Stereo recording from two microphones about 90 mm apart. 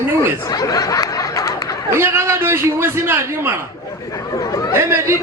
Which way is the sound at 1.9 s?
25° right (ahead or behind).